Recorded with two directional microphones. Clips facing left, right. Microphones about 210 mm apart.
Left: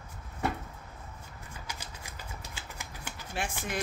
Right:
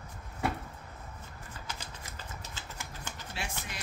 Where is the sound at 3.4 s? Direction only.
50° left (ahead or behind).